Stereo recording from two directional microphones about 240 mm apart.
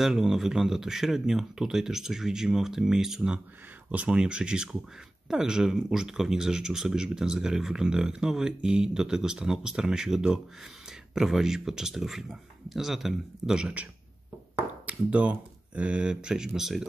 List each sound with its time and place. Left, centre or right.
0.0 s speech: centre
14.9 s speech: centre